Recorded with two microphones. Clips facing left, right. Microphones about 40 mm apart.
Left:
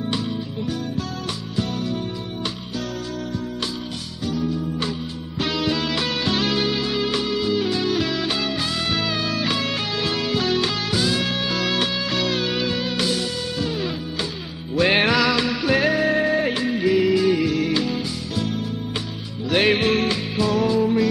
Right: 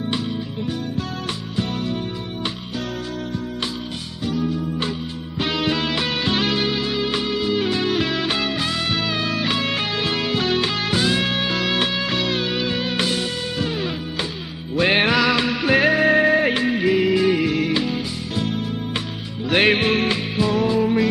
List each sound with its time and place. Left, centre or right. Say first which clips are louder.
4.2 s music: right 1 dB; right
14.8 s music: even; centre